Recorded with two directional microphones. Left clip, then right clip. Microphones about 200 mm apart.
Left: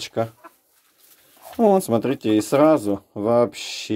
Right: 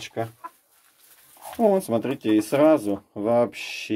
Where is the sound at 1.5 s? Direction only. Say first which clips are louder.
Left 3 dB; 35° left (ahead or behind).